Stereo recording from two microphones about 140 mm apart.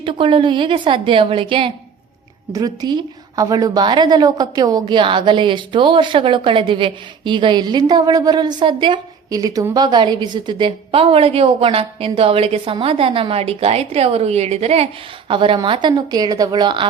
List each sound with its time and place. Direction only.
0.0 s a woman's voice: 35° right (ahead or behind)
2.5 s a woman's voice: 25° right (ahead or behind); by 14.8 s 50° right (ahead or behind)
15.3 s a woman's voice: 35° right (ahead or behind)